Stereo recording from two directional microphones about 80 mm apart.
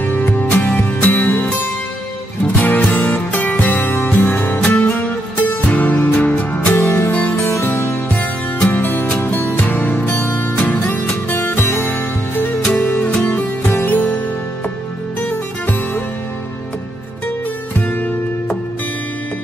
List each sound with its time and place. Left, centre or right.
0.0 s music: left
7.1 s music: centre
7.4 s music: left
8.2 s music: left
15.2 s music: left
17.7 s music: centre